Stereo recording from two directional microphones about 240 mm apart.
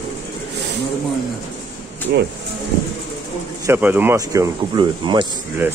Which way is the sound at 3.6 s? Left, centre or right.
Centre.